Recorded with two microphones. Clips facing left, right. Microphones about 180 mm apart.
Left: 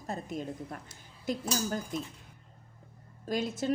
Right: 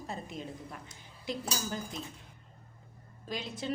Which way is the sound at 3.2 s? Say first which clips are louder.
Left 6 dB; 45° left (ahead or behind).